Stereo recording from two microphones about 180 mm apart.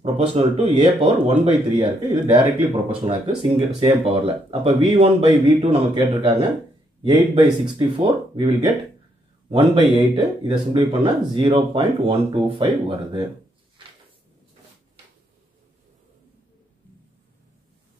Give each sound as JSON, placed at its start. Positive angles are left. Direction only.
{"t": 0.0, "sound": "speech", "side_deg": -35}
{"t": 2.4, "sound": "speech", "side_deg": -10}
{"t": 3.1, "sound": "speech", "side_deg": -30}
{"t": 7.0, "sound": "speech", "side_deg": -25}
{"t": 9.5, "sound": "speech", "side_deg": -30}